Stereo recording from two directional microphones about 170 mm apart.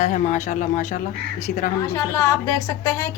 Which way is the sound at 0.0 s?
45° left (ahead or behind).